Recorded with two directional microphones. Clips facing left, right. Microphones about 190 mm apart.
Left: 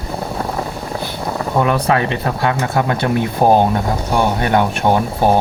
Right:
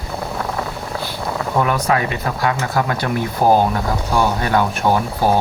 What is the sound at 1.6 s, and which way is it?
Speech, 30° left (ahead or behind).